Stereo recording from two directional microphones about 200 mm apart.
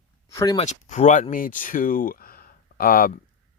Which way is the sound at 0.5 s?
35° left (ahead or behind).